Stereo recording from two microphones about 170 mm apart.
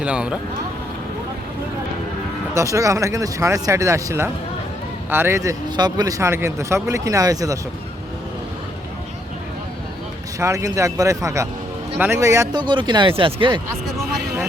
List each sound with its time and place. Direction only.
0.0 s speech: 5° right (ahead or behind)
2.6 s speech: 20° right (ahead or behind)
10.4 s speech: 20° right (ahead or behind)